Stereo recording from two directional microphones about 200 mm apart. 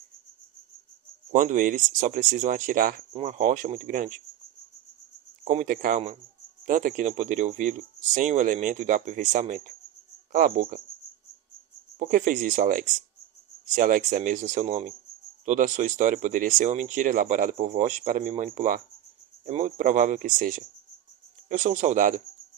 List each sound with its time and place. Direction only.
1.3 s speech: 40° right (ahead or behind)
5.5 s speech: 40° right (ahead or behind)
11.9 s speech: 40° right (ahead or behind)